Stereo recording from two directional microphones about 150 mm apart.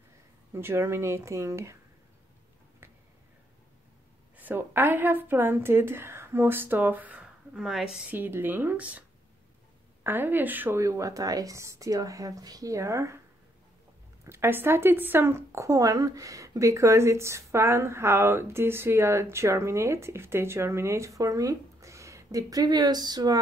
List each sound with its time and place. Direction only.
0.5 s a woman's voice: 15° right (ahead or behind)
4.4 s a woman's voice: 10° right (ahead or behind)
10.0 s speech: 15° right (ahead or behind)
14.2 s speech: 15° right (ahead or behind)